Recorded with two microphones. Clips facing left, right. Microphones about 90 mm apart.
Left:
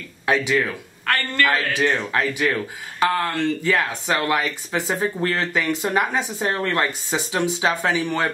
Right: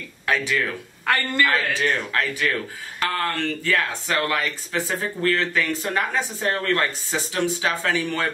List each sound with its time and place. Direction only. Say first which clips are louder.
0.3 s speech: left 3 dB; 20° left (ahead or behind)
1.0 s a woman's voice: even; 15° right (ahead or behind)
1.5 s speech: left 2 dB; 20° left (ahead or behind)